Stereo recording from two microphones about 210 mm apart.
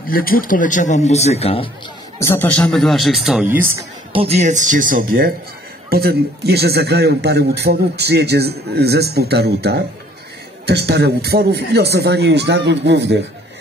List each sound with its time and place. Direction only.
0.1 s a man's voice: 45° left (ahead or behind)
2.1 s speech: 10° left (ahead or behind); by 3.7 s 10° right (ahead or behind)
4.1 s speech: 30° right (ahead or behind); by 13.2 s 55° right (ahead or behind)